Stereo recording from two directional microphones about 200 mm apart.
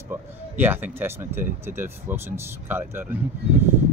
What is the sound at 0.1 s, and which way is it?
Speech, 10° right (ahead or behind).